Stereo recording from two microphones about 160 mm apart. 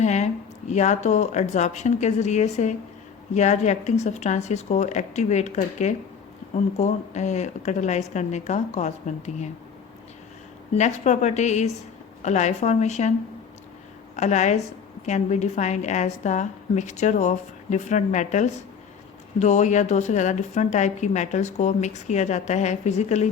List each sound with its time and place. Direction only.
0.0 s speech: 45° left (ahead or behind)
10.8 s speech: 45° left (ahead or behind)
14.2 s speech: 45° left (ahead or behind)